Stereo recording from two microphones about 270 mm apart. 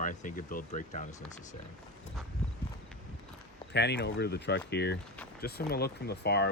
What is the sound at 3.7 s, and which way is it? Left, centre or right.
Speech, left.